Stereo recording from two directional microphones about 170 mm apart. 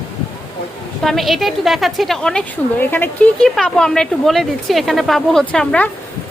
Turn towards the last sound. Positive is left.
turn(degrees=5)  # may be behind; listen again after turning